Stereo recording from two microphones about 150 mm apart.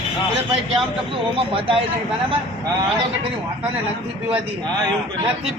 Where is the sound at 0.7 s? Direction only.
35° right (ahead or behind).